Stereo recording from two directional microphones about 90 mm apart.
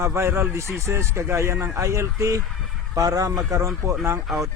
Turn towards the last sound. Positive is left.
turn(degrees=0)  # may be behind; listen again after turning